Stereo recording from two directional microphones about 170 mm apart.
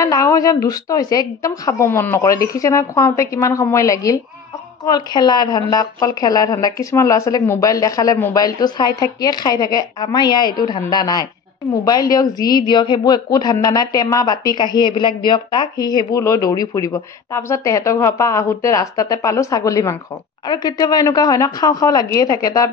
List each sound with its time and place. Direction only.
0.0 s a woman's voice: 20° left (ahead or behind)